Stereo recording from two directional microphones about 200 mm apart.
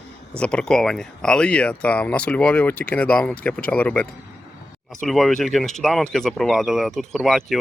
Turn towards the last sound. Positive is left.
turn(degrees=0)  # may be behind; listen again after turning